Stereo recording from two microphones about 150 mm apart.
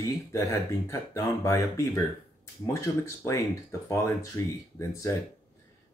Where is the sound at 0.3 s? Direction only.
20° left (ahead or behind).